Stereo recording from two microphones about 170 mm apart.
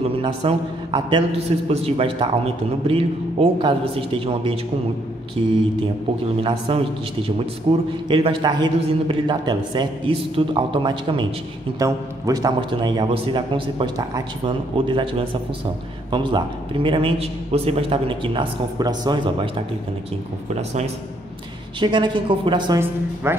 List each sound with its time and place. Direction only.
0.2 s a man's voice: 30° right (ahead or behind)
6.7 s a man's voice: 30° right (ahead or behind)
21.7 s a man's voice: 25° right (ahead or behind)
23.2 s speech: 15° right (ahead or behind)